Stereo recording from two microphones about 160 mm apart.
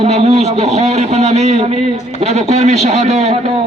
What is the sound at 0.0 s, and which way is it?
A man's voice, 40° right (ahead or behind).